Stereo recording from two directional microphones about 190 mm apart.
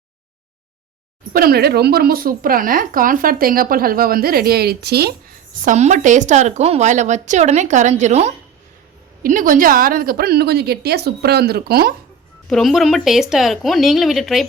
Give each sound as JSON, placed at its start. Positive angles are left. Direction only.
{"t": 1.3, "sound": "speech", "side_deg": -50}
{"t": 5.6, "sound": "a woman's voice", "side_deg": -40}
{"t": 12.5, "sound": "speech", "side_deg": 0}